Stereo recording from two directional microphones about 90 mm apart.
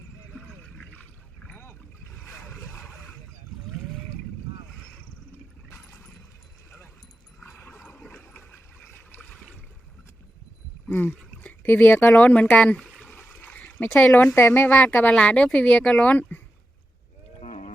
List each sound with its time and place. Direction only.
1.5 s boat: 25° left (ahead or behind)
5.7 s a sound: 25° left (ahead or behind)
7.4 s dog: 30° left (ahead or behind)
7.8 s a sound: 10° left (ahead or behind)
8.1 s water: 25° left (ahead or behind)
10.8 s a sound: 20° left (ahead or behind)
11.4 s speech: 20° left (ahead or behind)
13.4 s splash: 20° left (ahead or behind)
13.9 s speech: 15° left (ahead or behind)